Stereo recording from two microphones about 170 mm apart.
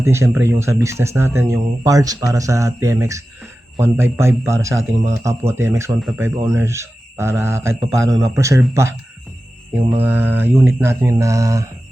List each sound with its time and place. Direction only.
0.0 s speech: 15° right (ahead or behind)
10.0 s speech: 10° right (ahead or behind)